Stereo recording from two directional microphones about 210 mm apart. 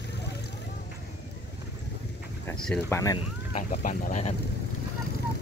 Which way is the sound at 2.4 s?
5° left (ahead or behind).